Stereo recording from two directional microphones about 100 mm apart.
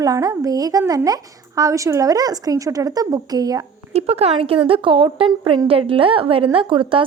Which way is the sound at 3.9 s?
90° right.